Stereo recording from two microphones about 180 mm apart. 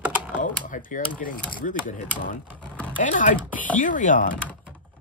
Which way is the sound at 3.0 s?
45° left (ahead or behind).